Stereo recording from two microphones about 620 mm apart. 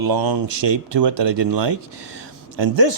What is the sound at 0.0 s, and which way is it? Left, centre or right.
Speech, right.